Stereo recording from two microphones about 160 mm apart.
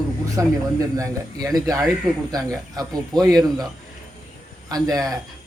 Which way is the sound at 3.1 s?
Centre (ahead or behind).